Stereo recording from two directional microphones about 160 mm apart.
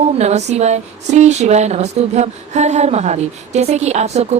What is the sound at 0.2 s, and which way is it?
A woman's voice, 45° right (ahead or behind).